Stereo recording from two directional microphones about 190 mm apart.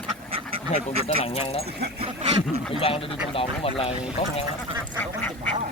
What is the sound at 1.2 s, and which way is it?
Speech, 30° left (ahead or behind).